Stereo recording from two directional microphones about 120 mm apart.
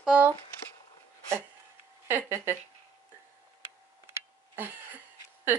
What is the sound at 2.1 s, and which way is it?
Speech, 20° right (ahead or behind).